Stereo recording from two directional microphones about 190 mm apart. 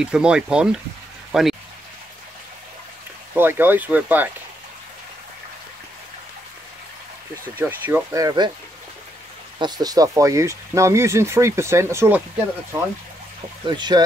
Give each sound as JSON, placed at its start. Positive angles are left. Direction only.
{"t": 0.0, "sound": "speech", "side_deg": -5}
{"t": 1.3, "sound": "a sound", "side_deg": 0}
{"t": 3.3, "sound": "speech", "side_deg": -10}
{"t": 7.5, "sound": "speech", "side_deg": -10}
{"t": 9.6, "sound": "speech", "side_deg": -20}
{"t": 13.7, "sound": "speech", "side_deg": -20}